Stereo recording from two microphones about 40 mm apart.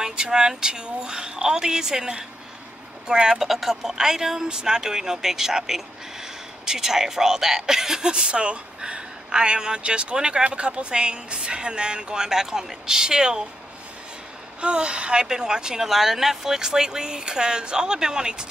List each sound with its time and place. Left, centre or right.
0.0 s a woman's voice: centre
14.6 s a woman's voice: right